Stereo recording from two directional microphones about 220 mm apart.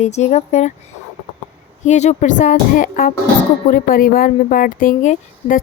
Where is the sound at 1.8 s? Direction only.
30° left (ahead or behind).